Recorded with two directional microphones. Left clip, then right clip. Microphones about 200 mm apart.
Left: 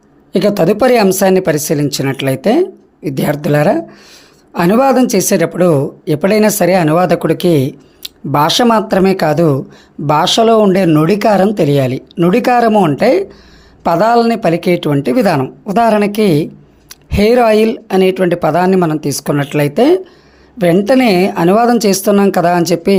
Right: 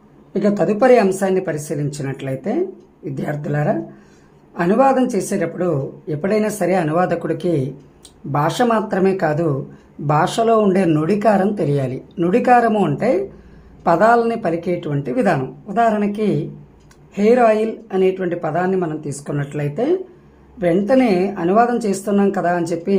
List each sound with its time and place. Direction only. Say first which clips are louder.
0.3 s speech: left 6 dB; 30° left (ahead or behind)